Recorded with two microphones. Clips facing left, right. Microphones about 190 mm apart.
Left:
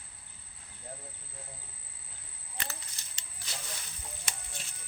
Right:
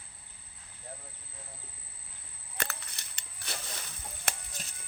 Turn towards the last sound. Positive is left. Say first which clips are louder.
# right 1 dB
turn(degrees=-40)  # may be behind; listen again after turning